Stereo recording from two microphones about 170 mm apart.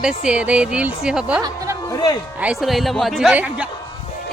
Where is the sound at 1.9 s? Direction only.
25° left (ahead or behind).